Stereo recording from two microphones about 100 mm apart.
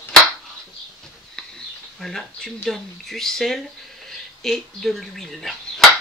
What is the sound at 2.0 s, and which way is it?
Speech, 5° left (ahead or behind).